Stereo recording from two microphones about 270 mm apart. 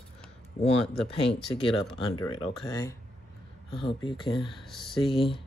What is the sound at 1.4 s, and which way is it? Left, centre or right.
Speech, centre.